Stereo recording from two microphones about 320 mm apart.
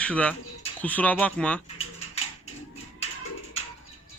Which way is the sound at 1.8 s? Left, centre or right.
Centre.